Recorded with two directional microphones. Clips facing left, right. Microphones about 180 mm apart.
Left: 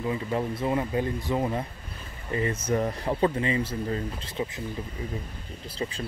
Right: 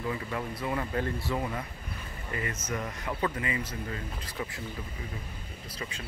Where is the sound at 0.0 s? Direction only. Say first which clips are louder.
Left 5 dB; 25° left (ahead or behind).